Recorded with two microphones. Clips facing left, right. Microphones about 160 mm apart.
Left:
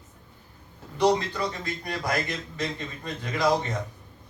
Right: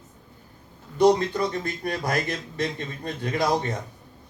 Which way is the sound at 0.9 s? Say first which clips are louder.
Right 4 dB; 50° right (ahead or behind).